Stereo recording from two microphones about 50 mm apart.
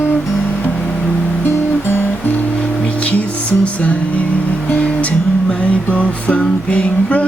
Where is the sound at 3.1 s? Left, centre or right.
Left.